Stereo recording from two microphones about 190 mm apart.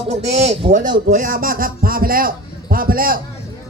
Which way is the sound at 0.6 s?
45° right (ahead or behind).